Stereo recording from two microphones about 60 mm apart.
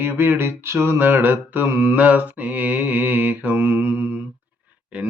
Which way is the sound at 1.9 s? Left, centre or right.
Right.